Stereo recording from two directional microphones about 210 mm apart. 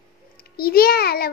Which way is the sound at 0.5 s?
45° left (ahead or behind).